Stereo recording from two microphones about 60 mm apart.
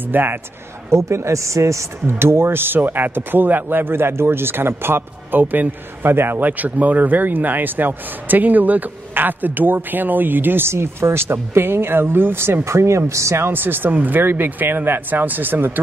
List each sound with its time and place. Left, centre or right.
0.1 s speech: right
0.8 s speech: right
2.1 s speech: right
12.6 s speech: right
13.5 s speech: right